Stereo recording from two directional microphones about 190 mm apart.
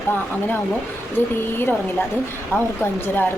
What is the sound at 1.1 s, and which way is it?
A woman's voice, 10° left (ahead or behind).